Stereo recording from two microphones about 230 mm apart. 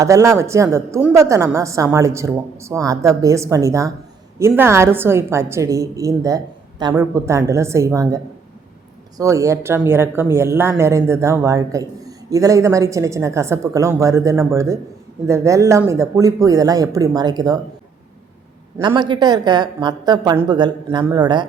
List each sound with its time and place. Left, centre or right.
0.0 s speech: centre
18.8 s speech: centre